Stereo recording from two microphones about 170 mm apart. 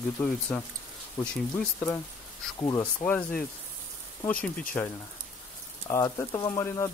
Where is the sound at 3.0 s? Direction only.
10° left (ahead or behind).